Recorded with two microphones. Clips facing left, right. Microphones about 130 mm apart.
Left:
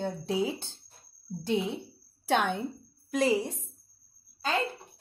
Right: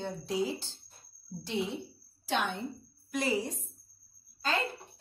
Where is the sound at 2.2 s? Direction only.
60° left (ahead or behind).